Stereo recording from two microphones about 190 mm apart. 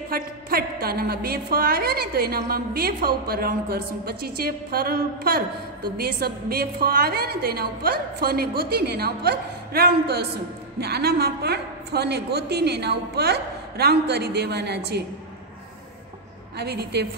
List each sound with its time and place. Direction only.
0.1 s a woman's voice: 55° right (ahead or behind)
16.5 s a woman's voice: 60° right (ahead or behind)